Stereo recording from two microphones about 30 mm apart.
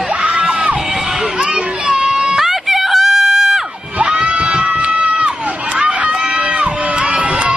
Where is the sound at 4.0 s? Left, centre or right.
Right.